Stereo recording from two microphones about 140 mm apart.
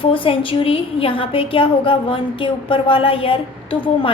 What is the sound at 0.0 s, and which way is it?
A woman's voice, 40° left (ahead or behind).